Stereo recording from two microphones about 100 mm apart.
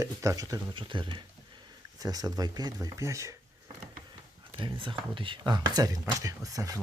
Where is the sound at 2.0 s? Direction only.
40° right (ahead or behind).